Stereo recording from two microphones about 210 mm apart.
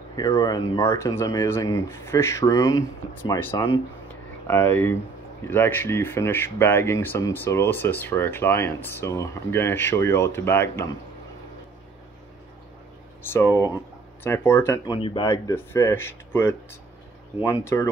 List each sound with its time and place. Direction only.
0.1 s speech: 15° left (ahead or behind)
13.3 s speech: 10° left (ahead or behind)
15.0 s speech: 25° left (ahead or behind)
15.2 s speech: 15° left (ahead or behind)